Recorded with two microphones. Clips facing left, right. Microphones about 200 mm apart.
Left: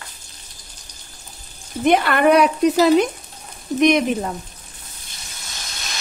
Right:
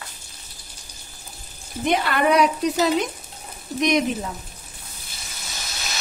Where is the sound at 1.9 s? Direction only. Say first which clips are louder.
Left 5 dB; 60° left (ahead or behind).